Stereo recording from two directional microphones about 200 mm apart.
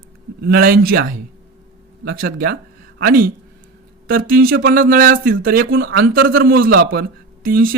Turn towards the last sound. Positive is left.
turn(degrees=-45)  # may be behind; listen again after turning